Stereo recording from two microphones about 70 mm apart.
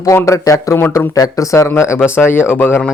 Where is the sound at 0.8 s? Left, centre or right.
Left.